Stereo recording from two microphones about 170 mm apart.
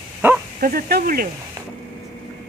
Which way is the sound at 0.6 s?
60° right (ahead or behind).